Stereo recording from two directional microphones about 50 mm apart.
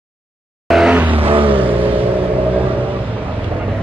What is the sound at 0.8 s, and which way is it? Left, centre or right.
Vehicle, right.